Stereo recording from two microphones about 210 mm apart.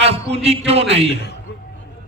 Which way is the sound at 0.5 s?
30° right (ahead or behind).